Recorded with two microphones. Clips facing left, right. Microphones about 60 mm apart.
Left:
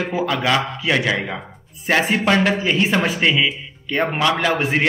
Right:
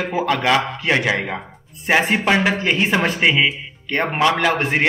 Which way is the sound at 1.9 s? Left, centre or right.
Centre.